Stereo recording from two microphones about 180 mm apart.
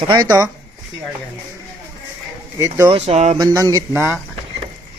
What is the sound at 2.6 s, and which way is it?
Speech, 15° right (ahead or behind).